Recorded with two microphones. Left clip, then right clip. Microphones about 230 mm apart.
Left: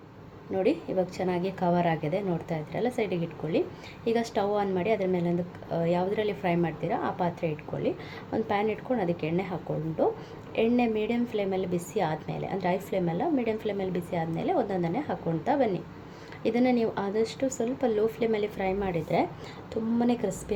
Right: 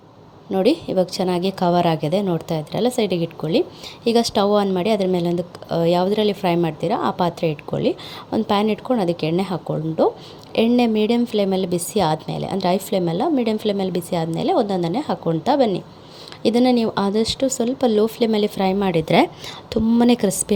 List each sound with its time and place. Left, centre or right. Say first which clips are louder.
0.5 s a woman's voice: right 9 dB; right